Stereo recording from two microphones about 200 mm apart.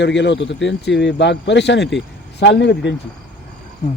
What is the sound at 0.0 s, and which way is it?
A man's voice, 60° left (ahead or behind).